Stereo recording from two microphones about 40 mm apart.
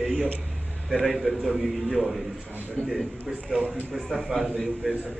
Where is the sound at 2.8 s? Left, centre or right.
Left.